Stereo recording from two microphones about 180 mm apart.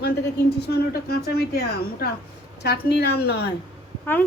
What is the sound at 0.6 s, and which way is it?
A woman's voice, 60° left (ahead or behind).